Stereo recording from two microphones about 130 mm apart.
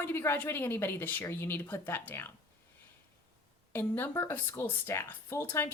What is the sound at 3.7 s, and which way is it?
Speech, 15° left (ahead or behind).